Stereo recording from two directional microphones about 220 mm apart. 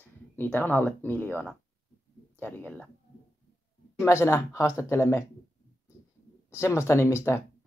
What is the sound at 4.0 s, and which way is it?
Speech, 10° left (ahead or behind).